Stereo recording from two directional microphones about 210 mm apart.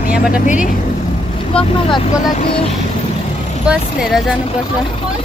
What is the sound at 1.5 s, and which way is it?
Speech, 25° left (ahead or behind).